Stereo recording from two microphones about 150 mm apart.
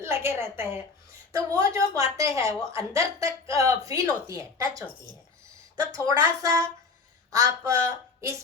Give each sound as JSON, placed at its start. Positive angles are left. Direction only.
{"t": 0.0, "sound": "a woman's voice", "side_deg": -15}
{"t": 6.1, "sound": "speech", "side_deg": -20}